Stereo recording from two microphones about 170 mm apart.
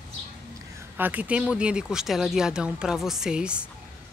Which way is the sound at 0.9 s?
10° right (ahead or behind).